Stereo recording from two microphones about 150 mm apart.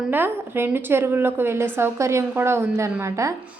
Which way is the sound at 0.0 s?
15° right (ahead or behind).